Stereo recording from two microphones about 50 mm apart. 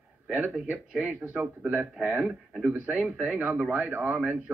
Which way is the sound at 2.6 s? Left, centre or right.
Right.